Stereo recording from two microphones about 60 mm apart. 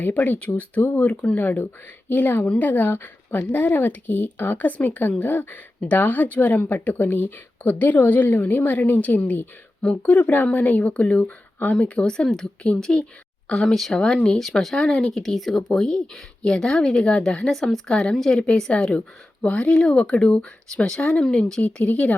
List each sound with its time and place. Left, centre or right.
0.0 s speech: left
0.8 s speech: left; by 21.6 s centre
21.6 s speech: left